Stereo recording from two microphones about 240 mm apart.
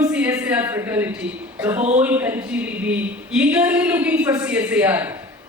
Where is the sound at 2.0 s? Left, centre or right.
Centre.